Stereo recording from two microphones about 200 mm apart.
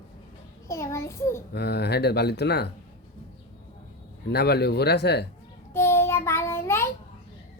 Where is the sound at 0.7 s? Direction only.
15° left (ahead or behind).